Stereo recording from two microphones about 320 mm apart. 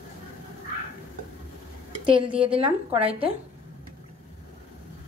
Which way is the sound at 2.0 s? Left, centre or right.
Centre.